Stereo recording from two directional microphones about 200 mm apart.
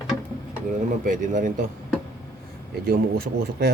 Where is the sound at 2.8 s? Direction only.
50° right (ahead or behind).